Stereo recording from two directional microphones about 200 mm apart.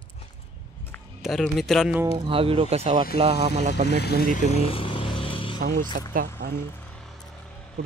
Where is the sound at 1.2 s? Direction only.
Centre (ahead or behind).